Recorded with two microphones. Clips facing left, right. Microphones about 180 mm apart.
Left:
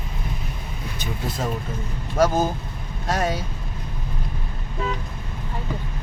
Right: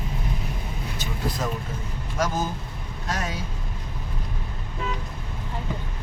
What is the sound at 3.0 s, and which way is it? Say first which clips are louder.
Speech: left 7 dB; 35° left (ahead or behind).